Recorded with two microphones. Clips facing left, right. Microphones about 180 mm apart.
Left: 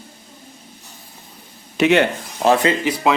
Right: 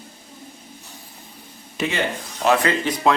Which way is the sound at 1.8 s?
70° left (ahead or behind).